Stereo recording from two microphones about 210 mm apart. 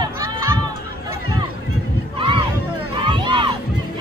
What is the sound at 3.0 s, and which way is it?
Crowd, 20° right (ahead or behind).